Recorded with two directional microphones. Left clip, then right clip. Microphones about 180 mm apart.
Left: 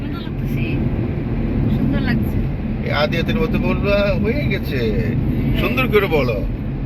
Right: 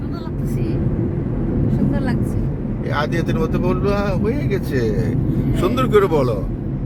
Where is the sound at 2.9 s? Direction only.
45° right (ahead or behind).